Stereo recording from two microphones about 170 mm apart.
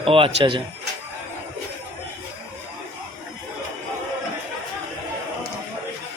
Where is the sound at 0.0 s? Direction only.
35° right (ahead or behind).